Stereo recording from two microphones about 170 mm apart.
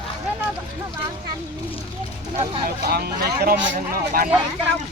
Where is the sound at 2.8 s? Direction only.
65° right (ahead or behind).